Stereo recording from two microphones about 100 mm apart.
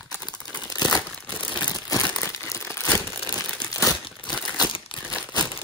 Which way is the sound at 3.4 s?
10° left (ahead or behind).